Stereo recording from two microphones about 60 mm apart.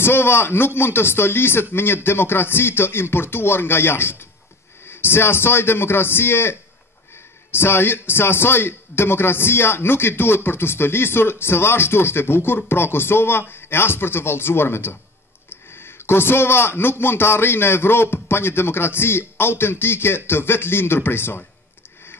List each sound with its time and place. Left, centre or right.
0.0 s a man's voice: left
7.5 s a man's voice: left